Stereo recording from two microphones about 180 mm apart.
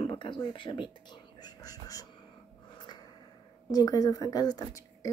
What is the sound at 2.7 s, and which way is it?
Snort, 25° left (ahead or behind).